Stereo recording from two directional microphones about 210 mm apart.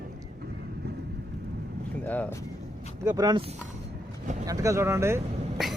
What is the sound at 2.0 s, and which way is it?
Speech, 10° left (ahead or behind).